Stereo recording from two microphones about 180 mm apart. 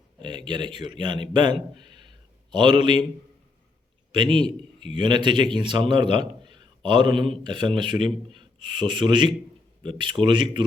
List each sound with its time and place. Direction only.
0.2 s speech: 25° right (ahead or behind)
4.1 s a man's voice: 25° right (ahead or behind)